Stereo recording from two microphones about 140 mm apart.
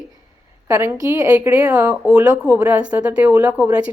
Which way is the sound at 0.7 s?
20° right (ahead or behind).